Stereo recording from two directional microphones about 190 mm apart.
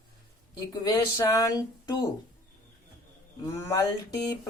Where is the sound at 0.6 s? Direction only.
20° left (ahead or behind).